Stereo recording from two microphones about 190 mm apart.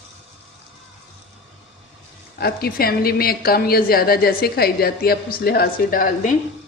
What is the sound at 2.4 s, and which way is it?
A woman's voice, 55° left (ahead or behind).